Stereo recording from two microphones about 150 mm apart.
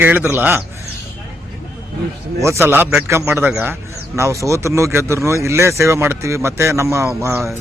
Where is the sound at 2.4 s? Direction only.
15° right (ahead or behind).